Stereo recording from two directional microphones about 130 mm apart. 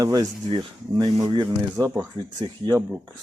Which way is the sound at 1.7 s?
25° right (ahead or behind).